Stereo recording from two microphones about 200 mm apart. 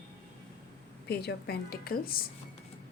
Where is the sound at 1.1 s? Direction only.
55° left (ahead or behind).